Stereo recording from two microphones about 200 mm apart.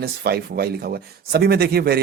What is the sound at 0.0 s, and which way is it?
Speech, 50° right (ahead or behind).